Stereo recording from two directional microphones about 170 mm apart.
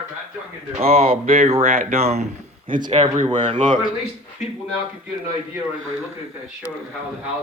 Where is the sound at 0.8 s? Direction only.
35° right (ahead or behind).